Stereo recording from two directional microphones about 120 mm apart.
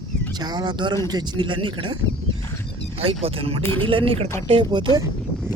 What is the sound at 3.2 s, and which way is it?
Speech, 55° right (ahead or behind).